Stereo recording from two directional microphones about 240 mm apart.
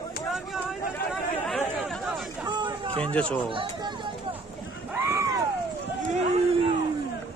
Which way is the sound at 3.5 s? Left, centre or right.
Centre.